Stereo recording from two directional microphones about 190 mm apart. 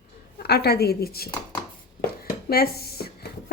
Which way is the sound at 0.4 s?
60° left (ahead or behind).